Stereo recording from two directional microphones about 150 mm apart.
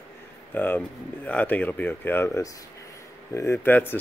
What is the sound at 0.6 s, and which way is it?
Speech, 10° left (ahead or behind).